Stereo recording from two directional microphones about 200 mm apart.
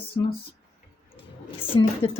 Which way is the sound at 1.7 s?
20° left (ahead or behind).